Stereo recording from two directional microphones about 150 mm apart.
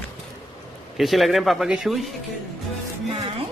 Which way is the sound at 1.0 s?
Centre (ahead or behind).